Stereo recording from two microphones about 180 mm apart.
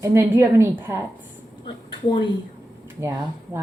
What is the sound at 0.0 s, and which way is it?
A woman's voice, 15° right (ahead or behind).